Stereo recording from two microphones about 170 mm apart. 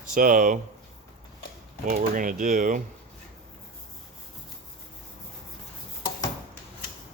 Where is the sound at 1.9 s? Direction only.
50° right (ahead or behind).